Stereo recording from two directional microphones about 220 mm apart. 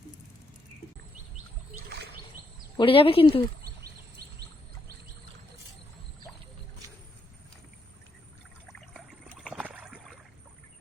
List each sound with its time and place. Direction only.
2.7 s a woman's voice: 25° left (ahead or behind)
8.6 s a sound: centre (ahead or behind)
9.4 s rowboat: 5° right (ahead or behind)